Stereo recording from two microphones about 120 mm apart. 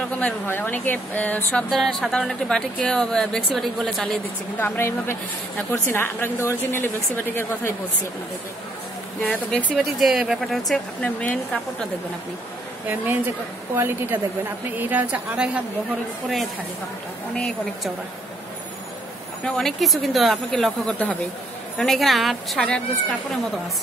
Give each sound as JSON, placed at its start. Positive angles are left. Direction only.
{"t": 0.1, "sound": "speech", "side_deg": 15}
{"t": 1.7, "sound": "speech", "side_deg": 0}
{"t": 4.6, "sound": "a woman's voice", "side_deg": 20}
{"t": 9.5, "sound": "speech", "side_deg": 10}
{"t": 9.9, "sound": "speech", "side_deg": -5}
{"t": 12.8, "sound": "a woman's voice", "side_deg": -15}
{"t": 17.4, "sound": "speech", "side_deg": 5}
{"t": 19.4, "sound": "speech", "side_deg": 5}